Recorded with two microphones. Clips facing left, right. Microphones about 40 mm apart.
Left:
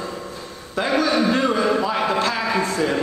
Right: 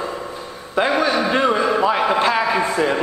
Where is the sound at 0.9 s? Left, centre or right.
Centre.